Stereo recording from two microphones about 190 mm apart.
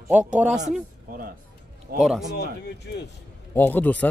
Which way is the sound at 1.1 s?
50° right (ahead or behind).